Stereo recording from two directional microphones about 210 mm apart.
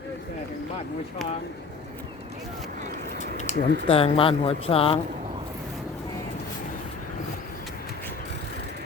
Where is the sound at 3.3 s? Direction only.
35° left (ahead or behind).